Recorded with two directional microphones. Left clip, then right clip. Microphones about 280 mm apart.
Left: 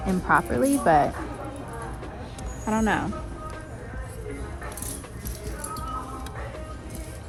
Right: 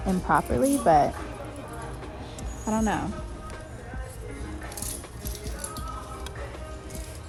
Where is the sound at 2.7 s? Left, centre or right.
Centre.